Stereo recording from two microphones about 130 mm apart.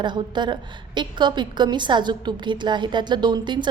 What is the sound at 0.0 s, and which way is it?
A woman's voice, 35° right (ahead or behind).